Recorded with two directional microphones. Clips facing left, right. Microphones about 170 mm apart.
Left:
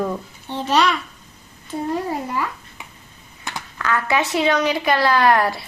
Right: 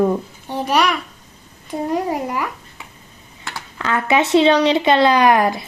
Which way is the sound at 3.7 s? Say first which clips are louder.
Right 3 dB; 25° right (ahead or behind).